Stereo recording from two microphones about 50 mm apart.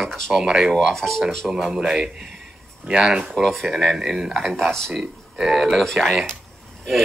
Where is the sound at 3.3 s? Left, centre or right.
Centre.